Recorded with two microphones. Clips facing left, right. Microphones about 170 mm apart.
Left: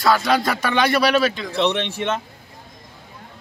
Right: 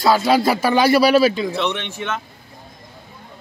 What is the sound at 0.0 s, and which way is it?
Speech, 30° right (ahead or behind).